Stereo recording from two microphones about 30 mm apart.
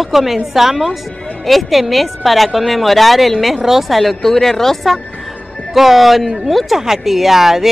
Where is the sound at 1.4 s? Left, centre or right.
Centre.